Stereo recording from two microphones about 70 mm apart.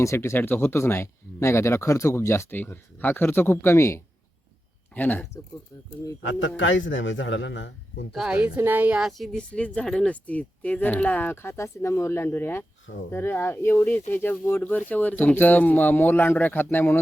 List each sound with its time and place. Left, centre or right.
0.0 s speech: left
0.3 s speech: left
4.9 s speech: left
8.1 s a woman's voice: centre
8.5 s a woman's voice: right
9.0 s speech: centre
9.4 s speech: centre
11.4 s speech: left